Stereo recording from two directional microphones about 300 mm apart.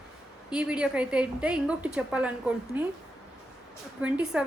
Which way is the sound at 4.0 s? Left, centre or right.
Centre.